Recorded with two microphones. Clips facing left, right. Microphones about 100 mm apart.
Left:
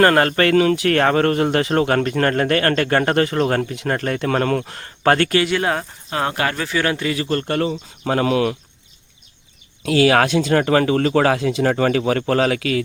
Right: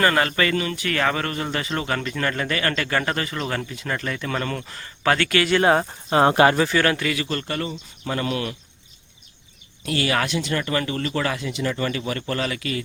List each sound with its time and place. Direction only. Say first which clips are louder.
0.0 s speech: left 6 dB; 55° left (ahead or behind)
0.5 s speech: left 9 dB; 85° left; by 5.3 s 50° left (ahead or behind)
6.1 s speech: right 6 dB; 25° right (ahead or behind)
6.8 s speech: left 2 dB; 25° left (ahead or behind)
7.4 s speech: left 7 dB; 55° left (ahead or behind)
8.0 s speech: left 8 dB; 85° left
10.0 s speech: left 9 dB; 90° left